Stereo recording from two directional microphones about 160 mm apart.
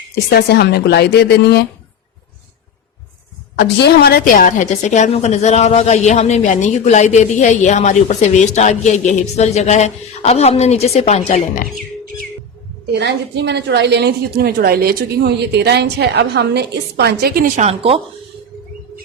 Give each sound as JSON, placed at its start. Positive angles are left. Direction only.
{"t": 0.3, "sound": "speech", "side_deg": 90}
{"t": 3.5, "sound": "a woman's voice", "side_deg": 85}
{"t": 12.9, "sound": "a woman's voice", "side_deg": -90}
{"t": 17.6, "sound": "a woman's voice", "side_deg": -35}